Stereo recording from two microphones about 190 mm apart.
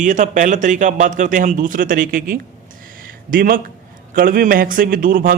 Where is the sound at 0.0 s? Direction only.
40° right (ahead or behind).